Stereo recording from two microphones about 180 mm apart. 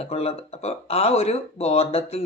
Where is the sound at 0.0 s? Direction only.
35° left (ahead or behind).